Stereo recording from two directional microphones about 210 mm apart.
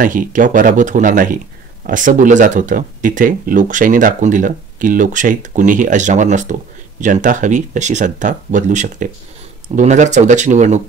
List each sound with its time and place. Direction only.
0.0 s speech: 40° right (ahead or behind)